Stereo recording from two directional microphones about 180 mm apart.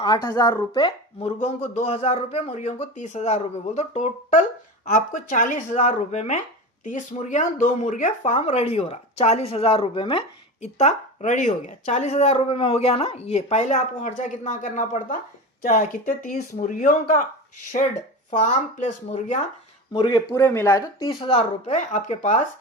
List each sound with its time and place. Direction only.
0.0 s speech: 25° left (ahead or behind); by 17.2 s 45° left (ahead or behind)
18.3 s speech: 45° left (ahead or behind)
20.0 s speech: 20° left (ahead or behind)
21.8 s speech: 40° left (ahead or behind)